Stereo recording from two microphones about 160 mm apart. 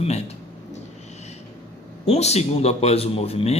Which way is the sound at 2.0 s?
40° left (ahead or behind).